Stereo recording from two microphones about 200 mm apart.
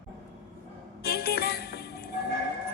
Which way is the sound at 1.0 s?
50° left (ahead or behind).